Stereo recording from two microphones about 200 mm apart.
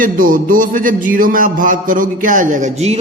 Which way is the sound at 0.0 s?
45° right (ahead or behind).